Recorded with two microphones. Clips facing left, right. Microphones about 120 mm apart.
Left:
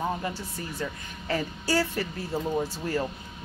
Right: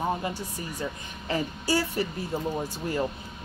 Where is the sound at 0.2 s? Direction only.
15° right (ahead or behind).